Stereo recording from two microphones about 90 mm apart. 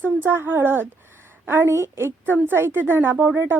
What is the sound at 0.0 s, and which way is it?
A woman's voice, 25° right (ahead or behind).